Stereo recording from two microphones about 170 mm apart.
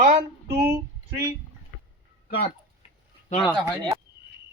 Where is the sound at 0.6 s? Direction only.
15° right (ahead or behind).